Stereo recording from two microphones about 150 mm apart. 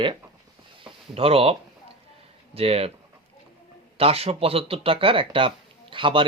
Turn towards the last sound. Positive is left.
turn(degrees=-35)  # may be behind; listen again after turning